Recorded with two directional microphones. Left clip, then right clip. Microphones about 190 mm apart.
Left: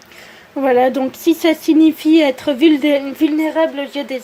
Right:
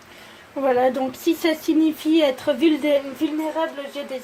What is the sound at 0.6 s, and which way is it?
Speech, 30° left (ahead or behind).